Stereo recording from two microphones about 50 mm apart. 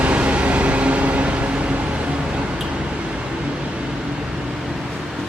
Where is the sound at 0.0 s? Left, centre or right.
Right.